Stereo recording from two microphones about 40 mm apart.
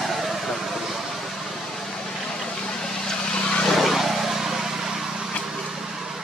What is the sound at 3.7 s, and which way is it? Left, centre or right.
Vehicle, centre.